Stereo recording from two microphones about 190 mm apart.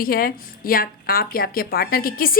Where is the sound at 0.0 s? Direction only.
50° left (ahead or behind).